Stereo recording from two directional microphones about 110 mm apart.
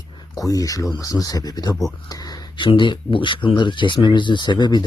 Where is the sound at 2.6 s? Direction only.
45° left (ahead or behind).